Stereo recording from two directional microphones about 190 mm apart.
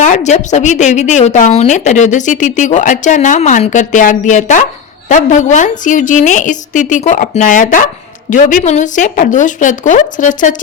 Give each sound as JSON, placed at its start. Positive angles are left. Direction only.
{"t": 0.0, "sound": "a woman's voice", "side_deg": 40}